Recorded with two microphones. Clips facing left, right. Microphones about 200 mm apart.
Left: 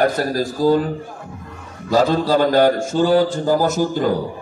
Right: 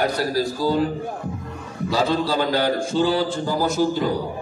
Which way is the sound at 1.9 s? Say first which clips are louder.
Left 6 dB; 45° left (ahead or behind).